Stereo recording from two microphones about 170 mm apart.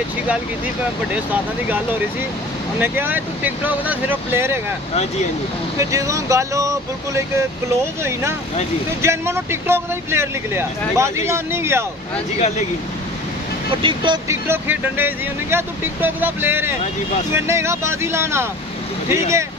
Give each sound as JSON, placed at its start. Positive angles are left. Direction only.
{"t": 2.8, "sound": "speech", "side_deg": -10}
{"t": 5.8, "sound": "speech", "side_deg": -20}
{"t": 12.4, "sound": "speech", "side_deg": 40}
{"t": 13.8, "sound": "speech", "side_deg": -30}
{"t": 14.2, "sound": "speech", "side_deg": -15}